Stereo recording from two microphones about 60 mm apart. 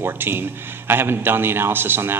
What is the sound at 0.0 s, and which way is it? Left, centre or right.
Speech, right.